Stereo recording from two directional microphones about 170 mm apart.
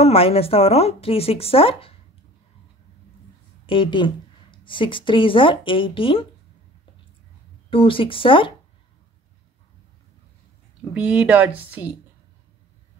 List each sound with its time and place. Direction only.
0.0 s speech: 35° left (ahead or behind)
3.6 s a woman's voice: 30° left (ahead or behind)
7.7 s speech: 30° left (ahead or behind)
10.9 s speech: 5° right (ahead or behind)